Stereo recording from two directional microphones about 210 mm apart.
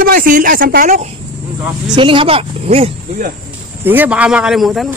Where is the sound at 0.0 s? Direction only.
40° right (ahead or behind).